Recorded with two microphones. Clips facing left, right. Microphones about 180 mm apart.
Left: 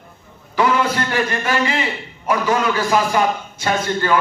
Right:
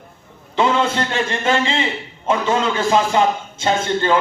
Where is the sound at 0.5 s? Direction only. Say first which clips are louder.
Even; 25° right (ahead or behind).